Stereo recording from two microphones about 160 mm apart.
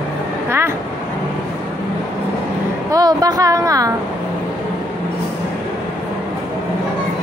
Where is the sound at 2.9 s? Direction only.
25° right (ahead or behind).